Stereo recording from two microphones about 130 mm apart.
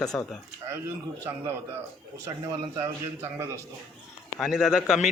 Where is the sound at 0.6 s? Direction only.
20° right (ahead or behind).